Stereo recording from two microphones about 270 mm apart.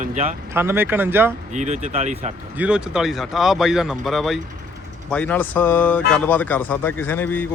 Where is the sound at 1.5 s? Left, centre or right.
Right.